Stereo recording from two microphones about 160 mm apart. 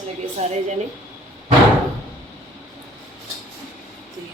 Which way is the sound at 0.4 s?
45° right (ahead or behind).